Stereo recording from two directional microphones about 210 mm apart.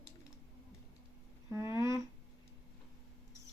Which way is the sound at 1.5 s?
15° right (ahead or behind).